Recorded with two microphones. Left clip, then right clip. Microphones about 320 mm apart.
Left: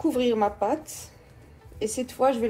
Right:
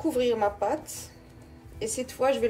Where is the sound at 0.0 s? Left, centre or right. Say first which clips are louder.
Left 1 dB; centre.